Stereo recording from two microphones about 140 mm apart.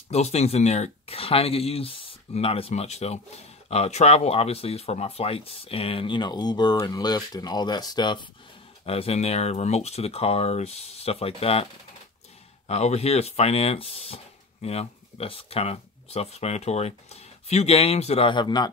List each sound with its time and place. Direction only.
0.1 s speech: 50° left (ahead or behind); by 8.3 s 35° left (ahead or behind)
8.8 s speech: 45° left (ahead or behind)
12.6 s speech: 50° left (ahead or behind); by 18.7 s 30° left (ahead or behind)